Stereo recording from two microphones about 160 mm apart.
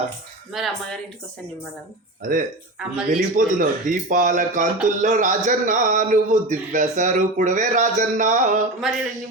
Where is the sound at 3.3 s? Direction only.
55° right (ahead or behind).